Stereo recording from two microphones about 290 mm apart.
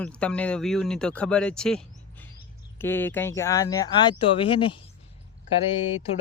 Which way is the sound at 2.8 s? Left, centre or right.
Centre.